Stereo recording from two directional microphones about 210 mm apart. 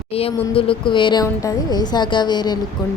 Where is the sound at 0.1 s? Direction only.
25° left (ahead or behind).